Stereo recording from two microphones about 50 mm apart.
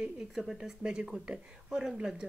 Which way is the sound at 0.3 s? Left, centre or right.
Centre.